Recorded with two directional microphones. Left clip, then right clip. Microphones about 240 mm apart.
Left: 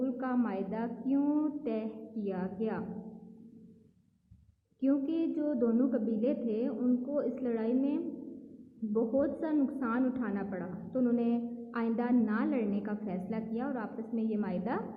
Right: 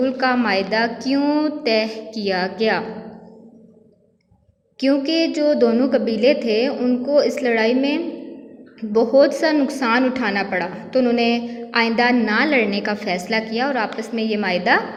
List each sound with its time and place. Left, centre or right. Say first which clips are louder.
0.0 s a woman's voice: right 15 dB; centre
4.8 s a woman's voice: right 13 dB; centre
5.5 s a woman's voice: right 16 dB; right
6.1 s a woman's voice: right 16 dB; centre
8.9 s a woman's voice: right 17 dB; right
9.4 s a woman's voice: right 14 dB; centre